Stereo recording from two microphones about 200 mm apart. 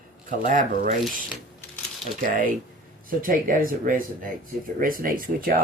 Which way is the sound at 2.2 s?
45° right (ahead or behind).